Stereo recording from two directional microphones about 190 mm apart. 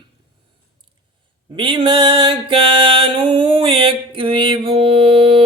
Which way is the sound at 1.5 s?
25° right (ahead or behind).